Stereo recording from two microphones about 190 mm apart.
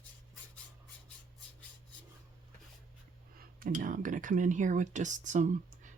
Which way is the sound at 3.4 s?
45° right (ahead or behind).